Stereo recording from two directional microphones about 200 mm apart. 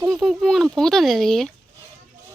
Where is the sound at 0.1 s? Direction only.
Centre (ahead or behind).